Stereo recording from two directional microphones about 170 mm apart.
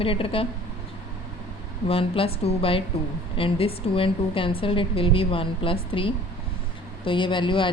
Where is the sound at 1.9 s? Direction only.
35° left (ahead or behind).